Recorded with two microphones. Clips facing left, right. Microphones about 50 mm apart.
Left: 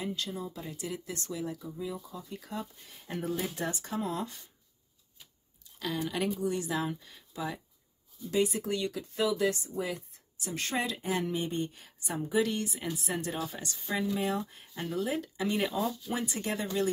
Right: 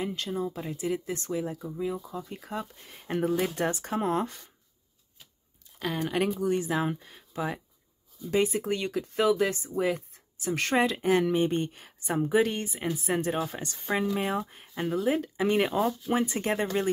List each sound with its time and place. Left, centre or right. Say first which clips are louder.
0.0 s speech: right 5 dB; right
3.2 s speech: right 7 dB; right
3.7 s speech: right 6 dB; right
5.8 s speech: right 4 dB; right
14.1 s speech: right 2 dB; right